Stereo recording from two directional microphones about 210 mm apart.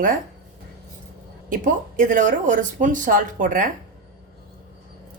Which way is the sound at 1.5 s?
40° right (ahead or behind).